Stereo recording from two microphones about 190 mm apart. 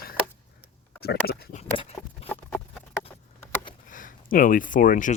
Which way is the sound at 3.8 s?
45° left (ahead or behind).